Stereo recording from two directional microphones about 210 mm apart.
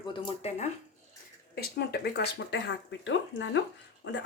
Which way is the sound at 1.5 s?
50° left (ahead or behind).